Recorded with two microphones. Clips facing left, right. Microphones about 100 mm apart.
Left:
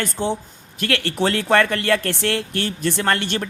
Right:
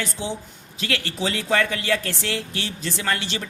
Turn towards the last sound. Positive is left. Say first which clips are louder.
# left 5 dB
turn(degrees=55)  # may be behind; listen again after turning